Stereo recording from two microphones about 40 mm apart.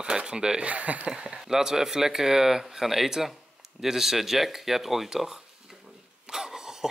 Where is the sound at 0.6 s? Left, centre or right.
Right.